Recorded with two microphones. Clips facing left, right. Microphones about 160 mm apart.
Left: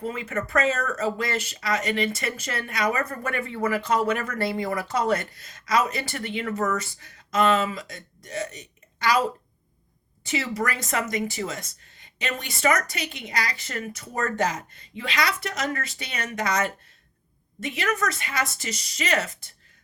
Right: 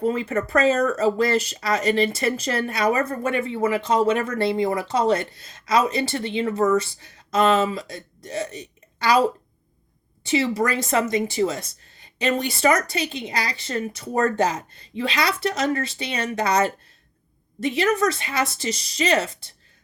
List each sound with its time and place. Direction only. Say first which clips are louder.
0.0 s speech: right 7 dB; 35° right (ahead or behind)